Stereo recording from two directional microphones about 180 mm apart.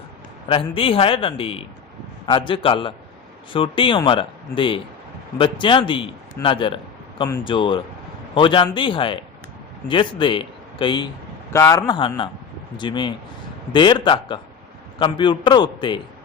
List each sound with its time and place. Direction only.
0.4 s a man's voice: 30° left (ahead or behind)